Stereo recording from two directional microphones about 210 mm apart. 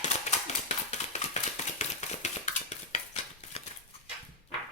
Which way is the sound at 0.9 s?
35° left (ahead or behind).